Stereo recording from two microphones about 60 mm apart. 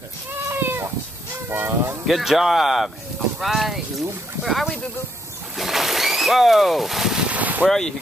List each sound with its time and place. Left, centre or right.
0.5 s cat: right
1.5 s speech: right
2.0 s speech: centre
7.2 s boat: right
7.6 s speech: centre